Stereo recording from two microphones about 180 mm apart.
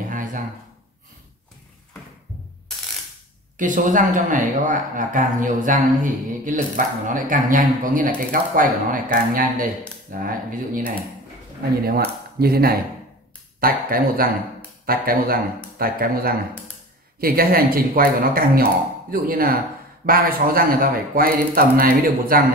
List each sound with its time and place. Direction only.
0.1 s a sound: 45° right (ahead or behind)
3.5 s speech: 45° right (ahead or behind)
11.8 s speech: 60° right (ahead or behind)